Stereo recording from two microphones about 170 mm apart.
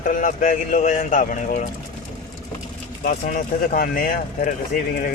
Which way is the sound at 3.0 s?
50° left (ahead or behind).